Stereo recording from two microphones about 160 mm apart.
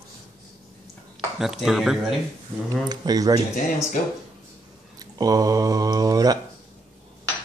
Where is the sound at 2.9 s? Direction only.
25° right (ahead or behind).